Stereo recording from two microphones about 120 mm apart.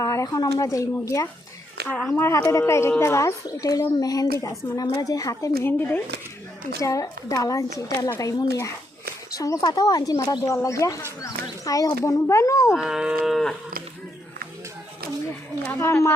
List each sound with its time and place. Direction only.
0.0 s a woman's voice: 25° left (ahead or behind)
6.7 s a woman's voice: 25° left (ahead or behind)
12.7 s moo: 5° right (ahead or behind)
15.6 s a woman's voice: 20° left (ahead or behind)